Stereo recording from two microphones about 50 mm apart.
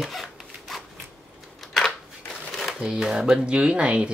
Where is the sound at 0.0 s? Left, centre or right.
Centre.